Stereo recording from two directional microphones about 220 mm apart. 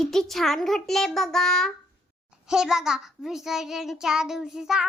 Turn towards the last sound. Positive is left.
turn(degrees=-5)  # may be behind; listen again after turning